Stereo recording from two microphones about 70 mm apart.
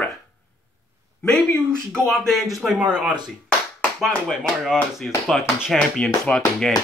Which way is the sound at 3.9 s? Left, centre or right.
Centre.